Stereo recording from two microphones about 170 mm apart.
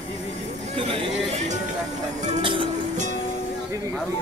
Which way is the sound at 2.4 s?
30° right (ahead or behind).